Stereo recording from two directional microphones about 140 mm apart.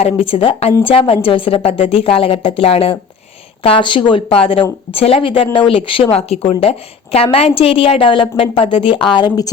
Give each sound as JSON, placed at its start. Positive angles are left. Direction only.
{"t": 0.0, "sound": "a woman's voice", "side_deg": 45}